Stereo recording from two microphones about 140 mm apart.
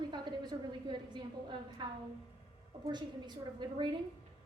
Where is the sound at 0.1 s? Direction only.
35° right (ahead or behind).